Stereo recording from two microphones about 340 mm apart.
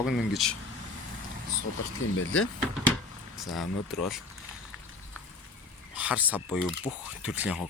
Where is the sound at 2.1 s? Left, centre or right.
Left.